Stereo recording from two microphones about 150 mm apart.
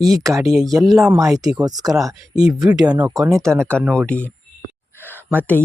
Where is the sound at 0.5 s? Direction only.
Centre (ahead or behind).